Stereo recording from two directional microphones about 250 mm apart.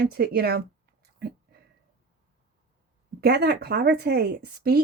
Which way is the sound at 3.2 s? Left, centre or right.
Right.